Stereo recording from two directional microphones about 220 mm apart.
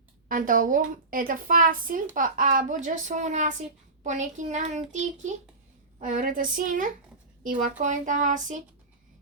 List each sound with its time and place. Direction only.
0.3 s a woman's voice: 40° right (ahead or behind)